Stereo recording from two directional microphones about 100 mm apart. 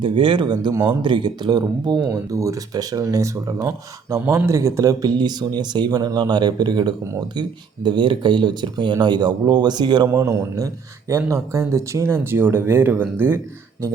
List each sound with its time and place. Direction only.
0.0 s speech: 55° right (ahead or behind)
0.7 s speech: 35° right (ahead or behind)
1.0 s speech: 50° right (ahead or behind)
2.0 s speech: 30° right (ahead or behind)
5.1 s speech: 45° right (ahead or behind)
10.1 s speech: 30° right (ahead or behind)